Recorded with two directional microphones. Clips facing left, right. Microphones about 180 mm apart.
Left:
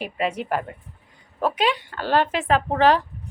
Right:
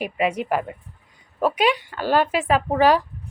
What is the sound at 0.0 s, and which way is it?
A woman's voice, 10° right (ahead or behind).